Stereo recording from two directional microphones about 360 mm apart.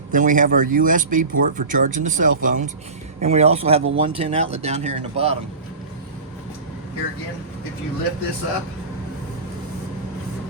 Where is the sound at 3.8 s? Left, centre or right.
Right.